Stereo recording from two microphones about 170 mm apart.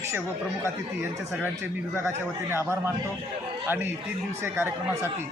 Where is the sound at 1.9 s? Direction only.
15° right (ahead or behind).